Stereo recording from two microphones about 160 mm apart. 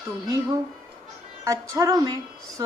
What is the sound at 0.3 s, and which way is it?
A woman's voice, 20° right (ahead or behind).